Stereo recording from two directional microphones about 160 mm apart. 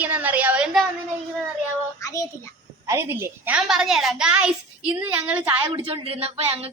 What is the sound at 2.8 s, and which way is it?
A woman's voice, 15° right (ahead or behind).